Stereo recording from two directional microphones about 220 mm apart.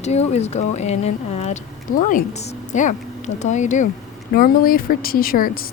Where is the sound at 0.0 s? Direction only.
30° left (ahead or behind).